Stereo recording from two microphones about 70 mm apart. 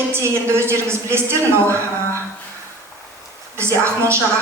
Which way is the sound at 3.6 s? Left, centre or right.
Right.